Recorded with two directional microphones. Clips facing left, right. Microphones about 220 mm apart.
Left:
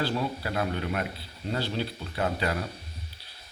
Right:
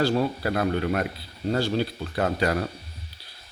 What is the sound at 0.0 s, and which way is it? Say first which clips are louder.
Speech: right 6 dB; 45° right (ahead or behind).